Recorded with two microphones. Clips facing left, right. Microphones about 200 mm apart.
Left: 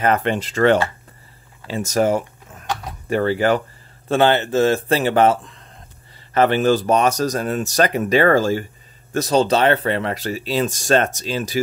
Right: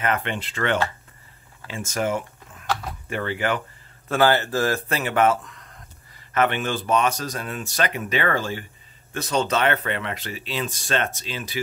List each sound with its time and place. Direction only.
0.0 s speech: 40° left (ahead or behind)
4.1 s speech: 25° left (ahead or behind); by 11.6 s 40° left (ahead or behind)